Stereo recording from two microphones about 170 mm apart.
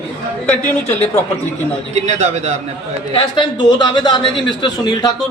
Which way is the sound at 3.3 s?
30° left (ahead or behind).